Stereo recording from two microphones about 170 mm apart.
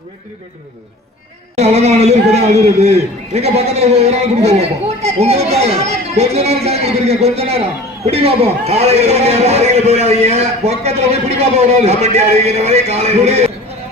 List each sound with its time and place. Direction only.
1.5 s a man's voice: 40° right (ahead or behind)